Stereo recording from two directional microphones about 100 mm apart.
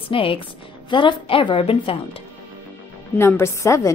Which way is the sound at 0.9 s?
50° left (ahead or behind).